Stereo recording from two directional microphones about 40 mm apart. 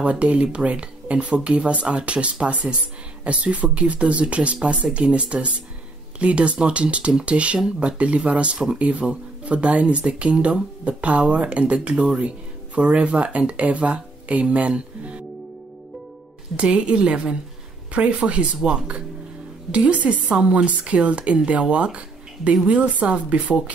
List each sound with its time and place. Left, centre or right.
0.0 s speech: right
16.5 s speech: right